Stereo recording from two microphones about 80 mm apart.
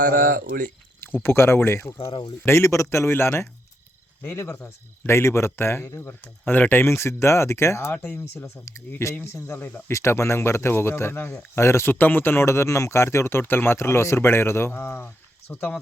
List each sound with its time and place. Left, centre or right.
1.0 s speech: left
4.6 s speech: left
7.9 s speech: left
8.2 s speech: left
9.9 s speech: left